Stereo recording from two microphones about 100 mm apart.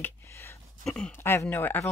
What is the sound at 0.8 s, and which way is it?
Speech, 5° left (ahead or behind).